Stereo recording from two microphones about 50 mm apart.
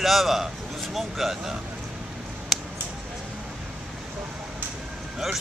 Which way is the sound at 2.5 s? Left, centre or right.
Centre.